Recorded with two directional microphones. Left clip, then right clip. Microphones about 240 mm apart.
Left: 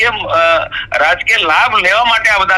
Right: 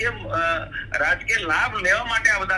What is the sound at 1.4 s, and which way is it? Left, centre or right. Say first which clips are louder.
A man's voice: left 11 dB; left.